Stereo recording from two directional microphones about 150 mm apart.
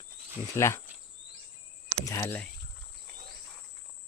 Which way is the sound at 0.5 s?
20° left (ahead or behind).